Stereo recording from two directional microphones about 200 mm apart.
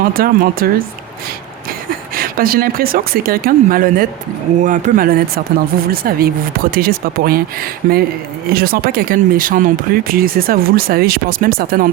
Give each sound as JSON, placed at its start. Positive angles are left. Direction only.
{"t": 0.0, "sound": "speech", "side_deg": -45}
{"t": 2.1, "sound": "speech", "side_deg": -45}